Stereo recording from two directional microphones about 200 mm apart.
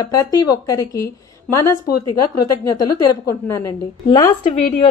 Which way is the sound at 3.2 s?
15° left (ahead or behind).